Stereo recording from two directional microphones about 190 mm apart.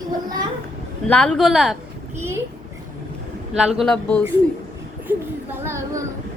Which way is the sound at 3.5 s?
Centre (ahead or behind).